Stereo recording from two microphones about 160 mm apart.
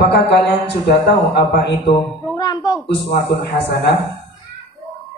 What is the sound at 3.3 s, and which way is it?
Speech, 90° left.